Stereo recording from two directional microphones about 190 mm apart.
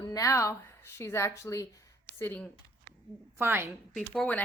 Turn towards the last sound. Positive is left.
turn(degrees=0)  # may be behind; listen again after turning